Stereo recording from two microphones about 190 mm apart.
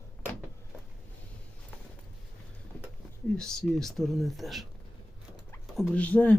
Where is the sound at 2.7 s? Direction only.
10° left (ahead or behind).